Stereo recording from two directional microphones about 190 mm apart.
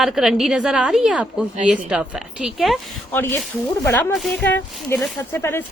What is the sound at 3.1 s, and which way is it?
Speech, 10° left (ahead or behind).